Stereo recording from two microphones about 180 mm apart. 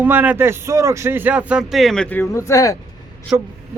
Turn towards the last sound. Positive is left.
turn(degrees=-10)  # may be behind; listen again after turning